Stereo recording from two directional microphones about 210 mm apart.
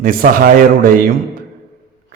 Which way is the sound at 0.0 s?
40° right (ahead or behind).